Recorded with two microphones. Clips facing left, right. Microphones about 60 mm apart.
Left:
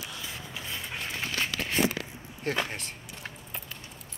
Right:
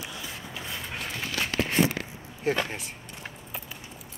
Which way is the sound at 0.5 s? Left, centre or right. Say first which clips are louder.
Right 2 dB; right.